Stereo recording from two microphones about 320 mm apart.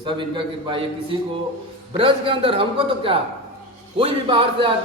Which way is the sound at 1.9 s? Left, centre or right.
Centre.